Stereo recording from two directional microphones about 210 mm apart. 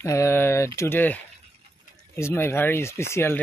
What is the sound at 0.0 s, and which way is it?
Speech, 15° left (ahead or behind).